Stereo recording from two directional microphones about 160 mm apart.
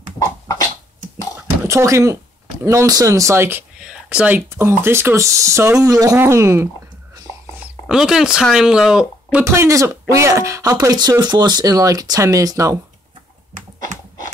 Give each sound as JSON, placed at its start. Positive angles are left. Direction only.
{"t": 1.6, "sound": "speech", "side_deg": -15}
{"t": 7.9, "sound": "speech", "side_deg": -5}
{"t": 9.4, "sound": "speech", "side_deg": -15}
{"t": 13.5, "sound": "a sound", "side_deg": -45}